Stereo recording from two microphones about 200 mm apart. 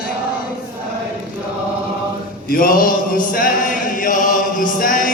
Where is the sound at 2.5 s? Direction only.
45° left (ahead or behind).